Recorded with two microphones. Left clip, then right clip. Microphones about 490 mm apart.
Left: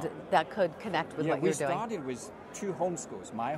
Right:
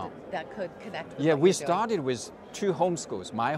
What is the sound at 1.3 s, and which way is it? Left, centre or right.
Speech, right.